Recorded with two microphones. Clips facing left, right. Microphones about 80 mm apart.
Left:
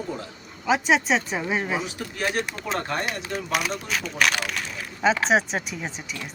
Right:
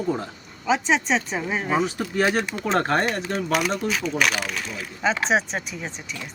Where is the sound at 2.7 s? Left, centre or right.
Right.